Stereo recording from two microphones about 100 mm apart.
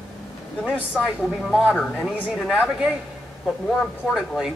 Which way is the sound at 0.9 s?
Centre (ahead or behind).